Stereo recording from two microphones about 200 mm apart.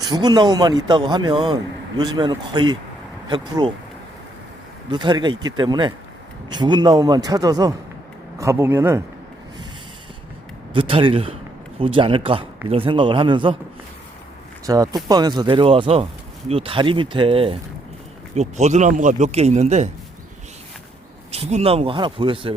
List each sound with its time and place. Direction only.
0.0 s a man's voice: 20° right (ahead or behind)
4.9 s a man's voice: 20° right (ahead or behind)
10.8 s a man's voice: 25° right (ahead or behind)
14.7 s a man's voice: 20° right (ahead or behind); by 19.9 s 35° right (ahead or behind)
21.3 s a man's voice: 30° right (ahead or behind)